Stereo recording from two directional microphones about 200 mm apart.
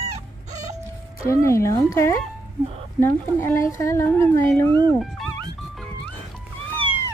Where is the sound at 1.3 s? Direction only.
15° left (ahead or behind).